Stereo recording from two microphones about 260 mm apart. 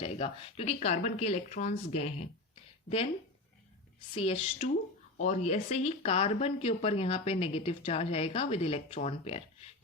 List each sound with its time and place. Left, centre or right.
0.0 s speech: left
4.1 s speech: left